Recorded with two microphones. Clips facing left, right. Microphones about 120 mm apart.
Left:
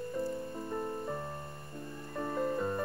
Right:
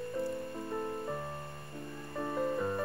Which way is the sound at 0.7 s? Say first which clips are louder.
Even; centre (ahead or behind).